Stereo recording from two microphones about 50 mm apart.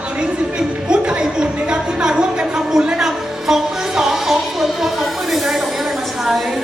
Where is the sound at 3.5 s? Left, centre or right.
Centre.